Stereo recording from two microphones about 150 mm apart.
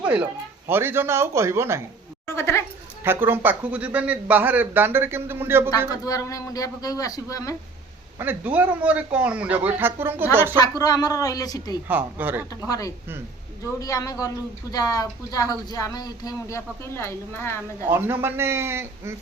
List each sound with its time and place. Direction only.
0.0 s a sound: 10° right (ahead or behind)
0.7 s a man's voice: 15° right (ahead or behind)
2.2 s goat: 15° left (ahead or behind)
3.0 s a man's voice: 15° right (ahead or behind)
5.9 s speech: 20° left (ahead or behind)
8.2 s a man's voice: 10° right (ahead or behind)
10.6 s speech: 25° left (ahead or behind)
11.9 s a man's voice: 10° right (ahead or behind)
12.6 s speech: 25° left (ahead or behind)
17.8 s a man's voice: 15° right (ahead or behind)